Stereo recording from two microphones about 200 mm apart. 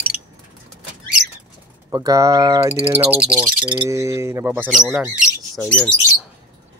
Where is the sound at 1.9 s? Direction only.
15° right (ahead or behind).